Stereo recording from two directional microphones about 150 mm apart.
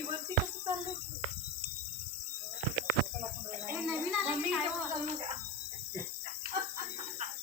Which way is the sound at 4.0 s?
10° right (ahead or behind).